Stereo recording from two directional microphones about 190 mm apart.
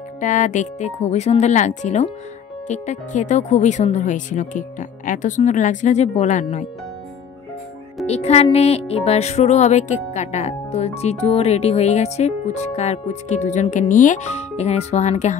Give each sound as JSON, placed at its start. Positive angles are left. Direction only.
{"t": 0.2, "sound": "music", "side_deg": 40}
{"t": 8.1, "sound": "music", "side_deg": 35}